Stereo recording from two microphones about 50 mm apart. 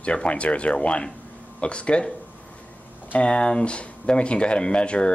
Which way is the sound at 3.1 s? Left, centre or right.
Centre.